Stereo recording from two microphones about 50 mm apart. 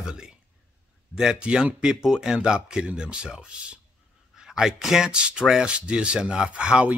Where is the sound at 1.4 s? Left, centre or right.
Right.